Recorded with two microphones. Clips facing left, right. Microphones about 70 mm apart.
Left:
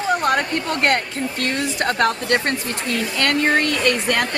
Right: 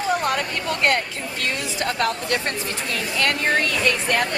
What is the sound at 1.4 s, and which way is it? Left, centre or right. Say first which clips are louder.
A woman's voice: left 3 dB; left.